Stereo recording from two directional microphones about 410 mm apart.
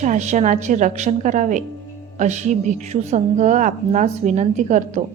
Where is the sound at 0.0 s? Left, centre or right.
Centre.